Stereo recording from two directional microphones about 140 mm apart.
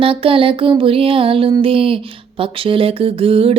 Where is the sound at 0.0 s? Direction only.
40° right (ahead or behind).